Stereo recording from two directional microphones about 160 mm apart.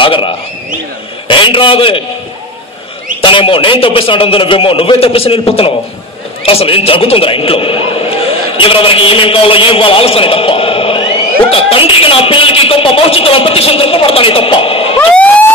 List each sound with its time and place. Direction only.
0.0 s a man's voice: 35° left (ahead or behind)
3.2 s a man's voice: 30° left (ahead or behind)
15.0 s emergency vehicle: 10° left (ahead or behind)